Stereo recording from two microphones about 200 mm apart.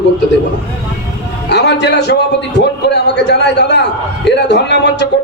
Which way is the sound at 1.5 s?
60° left (ahead or behind).